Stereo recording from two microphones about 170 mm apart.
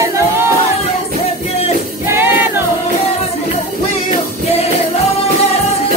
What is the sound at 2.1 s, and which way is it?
Music, 15° right (ahead or behind).